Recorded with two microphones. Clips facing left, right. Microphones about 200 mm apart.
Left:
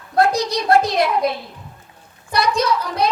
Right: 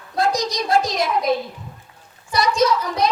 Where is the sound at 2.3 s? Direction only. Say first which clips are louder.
Right 1 dB; 60° left (ahead or behind).